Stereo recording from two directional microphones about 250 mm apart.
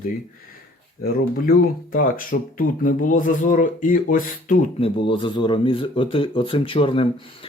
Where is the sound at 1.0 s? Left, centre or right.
Left.